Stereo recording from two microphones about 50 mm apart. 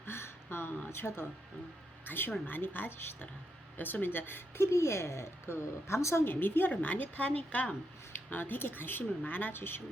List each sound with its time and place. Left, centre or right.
0.0 s a sound: left
0.9 s a woman's voice: left
6.2 s a woman's voice: left
8.1 s speech: left